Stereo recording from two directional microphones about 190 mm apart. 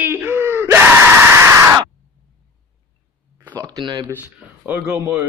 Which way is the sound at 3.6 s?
20° right (ahead or behind).